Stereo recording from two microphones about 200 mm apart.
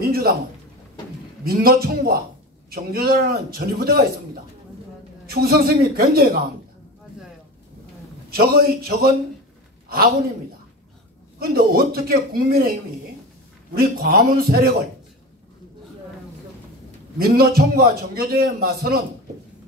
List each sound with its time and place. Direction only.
0.0 s a man's voice: 50° right (ahead or behind)
1.4 s a man's voice: 50° right (ahead or behind)
5.2 s a man's voice: 50° right (ahead or behind)
8.3 s a man's voice: 50° right (ahead or behind)
11.3 s a man's voice: 50° right (ahead or behind)
13.7 s a man's voice: 50° right (ahead or behind)
17.2 s a man's voice: 50° right (ahead or behind)